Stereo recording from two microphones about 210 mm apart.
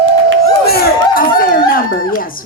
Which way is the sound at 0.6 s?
45° left (ahead or behind).